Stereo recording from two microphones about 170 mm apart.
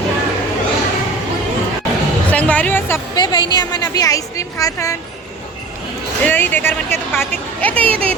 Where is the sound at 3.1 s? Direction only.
25° left (ahead or behind).